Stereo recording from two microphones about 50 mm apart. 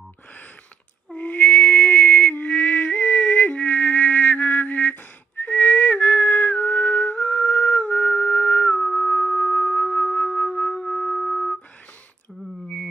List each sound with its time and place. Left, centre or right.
1.1 s music: left
8.7 s music: centre
10.2 s flute: centre